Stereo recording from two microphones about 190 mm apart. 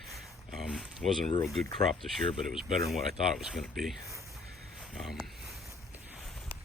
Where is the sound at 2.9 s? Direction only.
Centre (ahead or behind).